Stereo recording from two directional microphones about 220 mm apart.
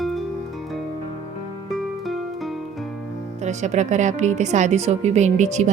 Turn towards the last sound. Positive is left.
turn(degrees=-30)  # may be behind; listen again after turning